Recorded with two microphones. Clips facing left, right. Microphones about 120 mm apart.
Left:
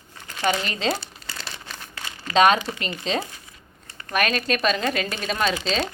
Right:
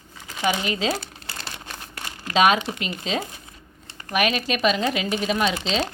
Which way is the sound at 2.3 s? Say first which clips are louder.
Left 1 dB; 5° right (ahead or behind).